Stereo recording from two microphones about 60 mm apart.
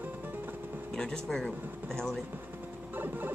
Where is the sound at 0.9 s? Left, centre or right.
Centre.